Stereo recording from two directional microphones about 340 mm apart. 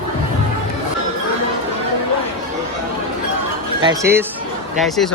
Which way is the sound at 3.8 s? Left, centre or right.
Centre.